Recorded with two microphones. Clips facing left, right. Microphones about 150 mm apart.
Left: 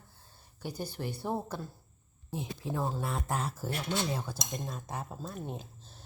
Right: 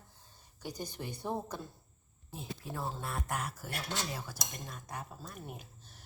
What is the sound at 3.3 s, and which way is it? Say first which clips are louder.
Speech: left 4 dB; 30° left (ahead or behind).